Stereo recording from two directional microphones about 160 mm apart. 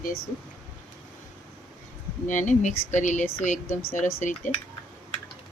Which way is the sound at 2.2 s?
50° left (ahead or behind).